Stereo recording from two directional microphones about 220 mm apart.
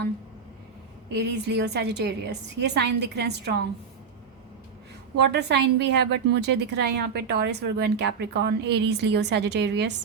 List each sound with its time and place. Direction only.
1.1 s a woman's voice: 50° right (ahead or behind)
5.1 s a woman's voice: 50° right (ahead or behind)